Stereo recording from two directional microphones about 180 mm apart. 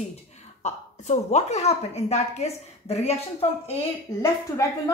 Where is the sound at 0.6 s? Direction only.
40° left (ahead or behind).